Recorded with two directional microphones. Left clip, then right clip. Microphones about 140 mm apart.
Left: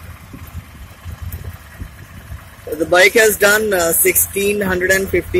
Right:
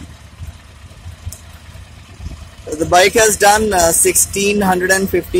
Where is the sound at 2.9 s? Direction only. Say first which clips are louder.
Even; 15° right (ahead or behind).